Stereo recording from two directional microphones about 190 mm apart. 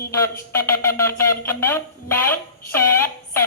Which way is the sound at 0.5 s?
15° left (ahead or behind).